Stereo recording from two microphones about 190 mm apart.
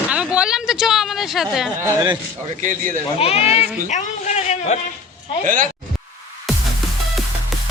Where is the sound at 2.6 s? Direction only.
45° right (ahead or behind).